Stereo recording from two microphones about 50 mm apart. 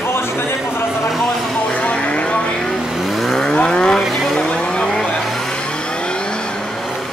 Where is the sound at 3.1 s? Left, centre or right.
Centre.